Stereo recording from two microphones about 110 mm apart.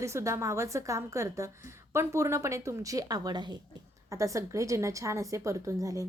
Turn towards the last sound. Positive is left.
turn(degrees=-30)  # may be behind; listen again after turning